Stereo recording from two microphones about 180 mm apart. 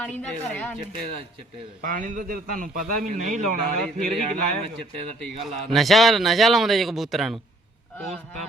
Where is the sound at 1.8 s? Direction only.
45° right (ahead or behind).